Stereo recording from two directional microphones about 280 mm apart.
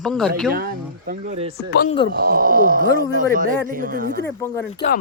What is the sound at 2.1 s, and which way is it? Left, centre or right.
Speech, right.